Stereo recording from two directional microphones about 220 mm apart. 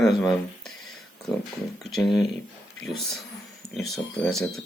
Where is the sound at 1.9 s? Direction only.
Centre (ahead or behind).